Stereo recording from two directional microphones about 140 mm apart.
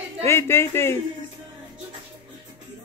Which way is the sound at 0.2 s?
20° left (ahead or behind).